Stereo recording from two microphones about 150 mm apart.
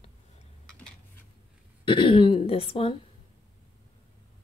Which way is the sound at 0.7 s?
5° left (ahead or behind).